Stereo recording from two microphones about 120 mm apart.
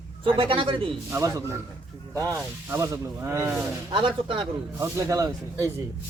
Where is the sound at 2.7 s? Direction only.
25° right (ahead or behind).